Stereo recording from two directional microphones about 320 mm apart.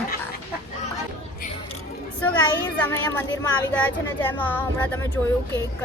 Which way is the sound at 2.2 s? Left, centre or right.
Centre.